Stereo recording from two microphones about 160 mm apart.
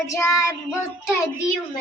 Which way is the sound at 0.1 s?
20° left (ahead or behind).